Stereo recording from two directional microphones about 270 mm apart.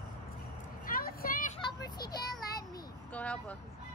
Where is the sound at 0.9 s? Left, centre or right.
Left.